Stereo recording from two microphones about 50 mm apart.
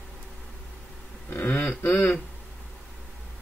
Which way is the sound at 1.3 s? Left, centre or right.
Left.